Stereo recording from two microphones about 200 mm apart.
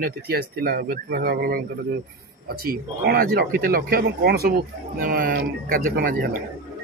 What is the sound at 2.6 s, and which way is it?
Speech, 50° right (ahead or behind).